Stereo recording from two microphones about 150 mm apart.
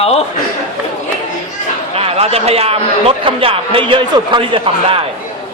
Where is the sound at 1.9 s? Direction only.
40° right (ahead or behind).